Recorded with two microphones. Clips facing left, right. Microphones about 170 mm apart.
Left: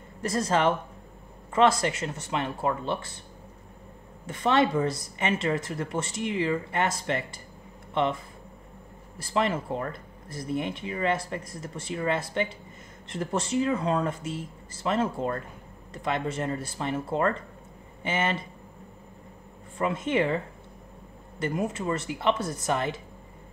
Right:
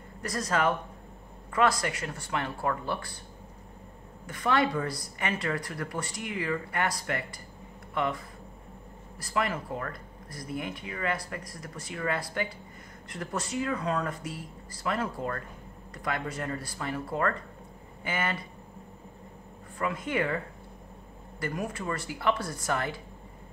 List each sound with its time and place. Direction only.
0.2 s speech: 25° left (ahead or behind)
4.3 s speech: 25° left (ahead or behind)
9.2 s speech: 25° left (ahead or behind)
19.8 s speech: 25° left (ahead or behind)